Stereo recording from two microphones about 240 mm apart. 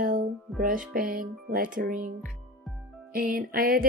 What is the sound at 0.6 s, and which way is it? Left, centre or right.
Speech, right.